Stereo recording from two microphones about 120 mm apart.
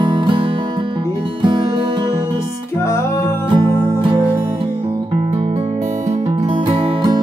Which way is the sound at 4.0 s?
45° right (ahead or behind).